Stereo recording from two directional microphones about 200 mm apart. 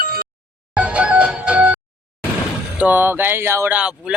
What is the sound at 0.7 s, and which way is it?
Music, 5° right (ahead or behind).